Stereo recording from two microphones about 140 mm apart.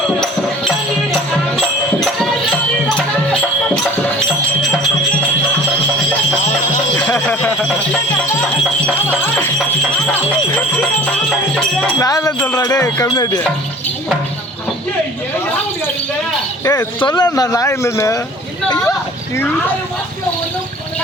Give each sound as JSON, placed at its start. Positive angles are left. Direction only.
{"t": 6.9, "sound": "a sound", "side_deg": 10}
{"t": 9.0, "sound": "music", "side_deg": 15}
{"t": 11.9, "sound": "speech", "side_deg": 25}
{"t": 16.6, "sound": "speech", "side_deg": 30}
{"t": 19.4, "sound": "speech", "side_deg": 10}